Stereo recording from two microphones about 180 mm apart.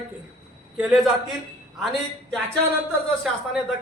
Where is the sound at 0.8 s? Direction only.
Centre (ahead or behind).